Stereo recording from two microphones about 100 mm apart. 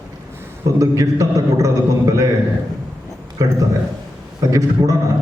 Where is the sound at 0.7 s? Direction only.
30° right (ahead or behind).